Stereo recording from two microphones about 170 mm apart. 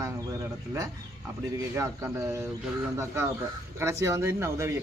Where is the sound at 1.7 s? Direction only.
15° right (ahead or behind).